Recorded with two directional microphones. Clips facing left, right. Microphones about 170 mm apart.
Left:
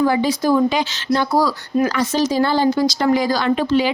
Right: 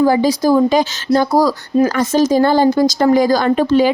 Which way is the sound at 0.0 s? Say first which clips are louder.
Right 4 dB; 40° right (ahead or behind).